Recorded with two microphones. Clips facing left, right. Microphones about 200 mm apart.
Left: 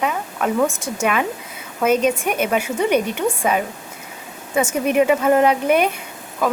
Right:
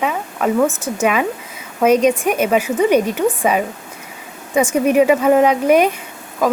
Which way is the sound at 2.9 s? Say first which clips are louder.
Right 2 dB; 35° right (ahead or behind).